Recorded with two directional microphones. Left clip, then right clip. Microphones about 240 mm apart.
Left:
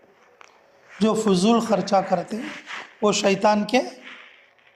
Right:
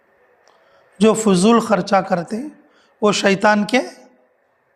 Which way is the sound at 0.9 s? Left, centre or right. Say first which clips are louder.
Right 6 dB; right.